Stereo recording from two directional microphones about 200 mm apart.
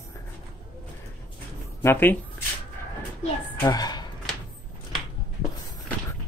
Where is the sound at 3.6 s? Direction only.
20° left (ahead or behind).